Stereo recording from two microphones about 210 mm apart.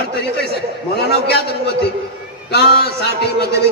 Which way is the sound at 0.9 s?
50° left (ahead or behind).